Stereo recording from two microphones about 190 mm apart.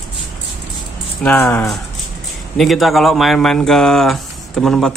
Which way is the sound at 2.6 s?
Centre (ahead or behind).